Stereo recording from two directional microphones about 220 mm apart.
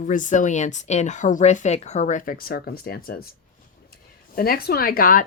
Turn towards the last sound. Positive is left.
turn(degrees=40)  # may be behind; listen again after turning